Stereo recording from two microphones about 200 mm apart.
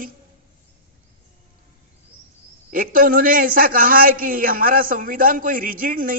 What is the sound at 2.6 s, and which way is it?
Speech, 45° right (ahead or behind).